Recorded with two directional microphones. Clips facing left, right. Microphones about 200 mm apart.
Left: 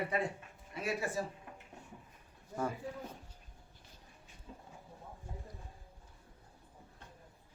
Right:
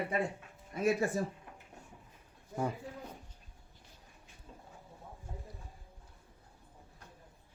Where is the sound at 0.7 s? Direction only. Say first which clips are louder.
Right 6 dB; 45° right (ahead or behind).